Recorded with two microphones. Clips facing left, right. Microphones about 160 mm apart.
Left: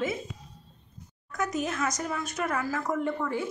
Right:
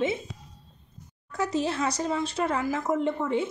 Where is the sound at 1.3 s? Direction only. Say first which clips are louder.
Right 3 dB; 30° right (ahead or behind).